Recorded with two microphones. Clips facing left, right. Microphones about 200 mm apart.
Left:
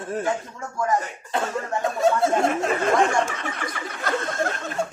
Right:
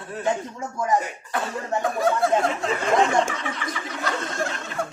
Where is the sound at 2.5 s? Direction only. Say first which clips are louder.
Left 3 dB; 50° left (ahead or behind).